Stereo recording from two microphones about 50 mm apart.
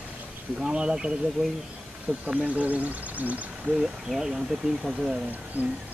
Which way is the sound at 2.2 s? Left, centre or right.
Right.